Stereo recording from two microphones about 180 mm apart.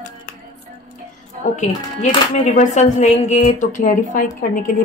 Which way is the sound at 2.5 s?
40° left (ahead or behind).